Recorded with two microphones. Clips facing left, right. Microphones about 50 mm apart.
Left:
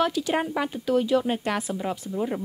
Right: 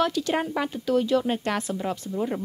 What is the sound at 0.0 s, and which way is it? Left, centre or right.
Speech, centre.